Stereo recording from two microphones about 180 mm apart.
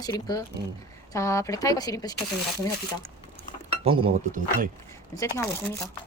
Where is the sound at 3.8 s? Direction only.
30° right (ahead or behind).